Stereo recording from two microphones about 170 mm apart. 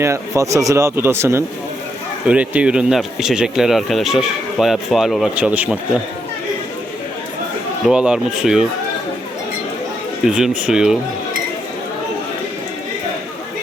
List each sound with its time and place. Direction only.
0.0 s speech: 15° right (ahead or behind)
7.9 s speech: 5° right (ahead or behind)
10.2 s speech: 5° right (ahead or behind)